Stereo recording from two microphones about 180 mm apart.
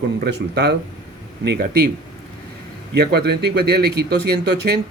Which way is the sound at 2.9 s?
65° right (ahead or behind).